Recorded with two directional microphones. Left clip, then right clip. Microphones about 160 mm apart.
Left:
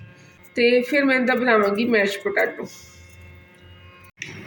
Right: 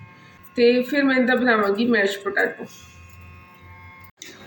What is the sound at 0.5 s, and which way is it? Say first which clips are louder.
A woman's voice: even; 55° left (ahead or behind).